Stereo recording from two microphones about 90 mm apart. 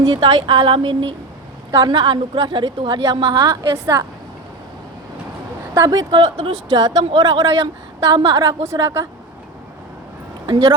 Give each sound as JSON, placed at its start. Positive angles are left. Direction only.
{"t": 0.0, "sound": "speech", "side_deg": -55}
{"t": 1.9, "sound": "a woman's voice", "side_deg": -60}
{"t": 5.7, "sound": "speech", "side_deg": -40}
{"t": 6.1, "sound": "a woman's voice", "side_deg": -60}
{"t": 8.6, "sound": "a woman's voice", "side_deg": -30}
{"t": 10.4, "sound": "speech", "side_deg": -55}